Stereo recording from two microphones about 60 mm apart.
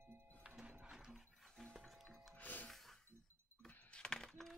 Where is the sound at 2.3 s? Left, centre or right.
Left.